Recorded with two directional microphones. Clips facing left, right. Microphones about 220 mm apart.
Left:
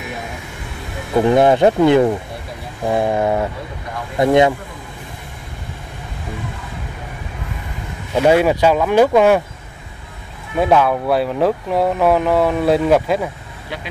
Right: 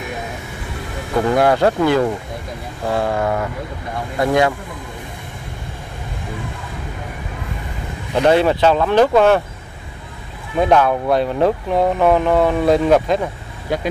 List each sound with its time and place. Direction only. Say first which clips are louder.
1.1 s speech: left 3 dB; 20° left (ahead or behind)
8.1 s speech: left 1 dB; 10° left (ahead or behind)
10.6 s speech: even; 5° left (ahead or behind)
13.7 s speech: right 8 dB; 45° right (ahead or behind)